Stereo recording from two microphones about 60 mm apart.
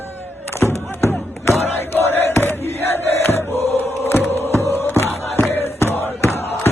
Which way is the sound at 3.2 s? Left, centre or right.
Left.